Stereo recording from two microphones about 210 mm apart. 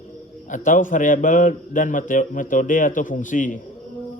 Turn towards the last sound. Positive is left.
turn(degrees=40)  # may be behind; listen again after turning